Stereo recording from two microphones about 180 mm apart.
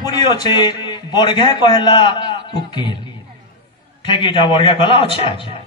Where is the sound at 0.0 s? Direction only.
25° left (ahead or behind).